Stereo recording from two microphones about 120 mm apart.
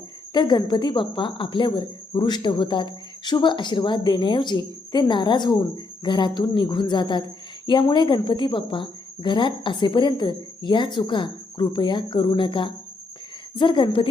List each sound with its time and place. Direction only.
0.3 s speech: 40° left (ahead or behind)